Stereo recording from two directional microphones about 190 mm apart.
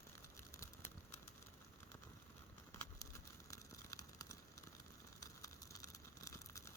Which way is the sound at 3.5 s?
20° left (ahead or behind).